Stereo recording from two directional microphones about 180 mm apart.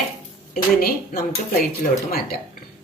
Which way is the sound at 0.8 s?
55° left (ahead or behind).